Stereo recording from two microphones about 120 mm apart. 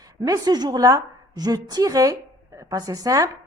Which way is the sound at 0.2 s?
30° right (ahead or behind).